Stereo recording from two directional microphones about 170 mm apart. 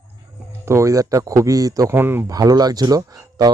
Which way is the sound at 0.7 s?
20° right (ahead or behind).